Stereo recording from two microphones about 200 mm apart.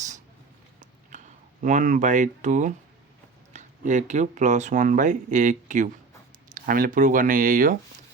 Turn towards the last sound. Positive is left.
turn(degrees=-45)  # may be behind; listen again after turning